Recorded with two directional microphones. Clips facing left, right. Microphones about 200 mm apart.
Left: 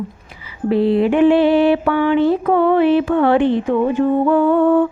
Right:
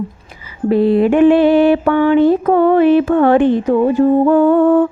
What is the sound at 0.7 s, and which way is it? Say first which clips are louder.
A woman's voice: right 3 dB; 45° right (ahead or behind).